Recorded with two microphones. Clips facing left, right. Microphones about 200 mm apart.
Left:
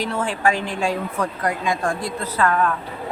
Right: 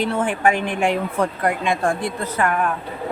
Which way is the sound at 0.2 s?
20° right (ahead or behind).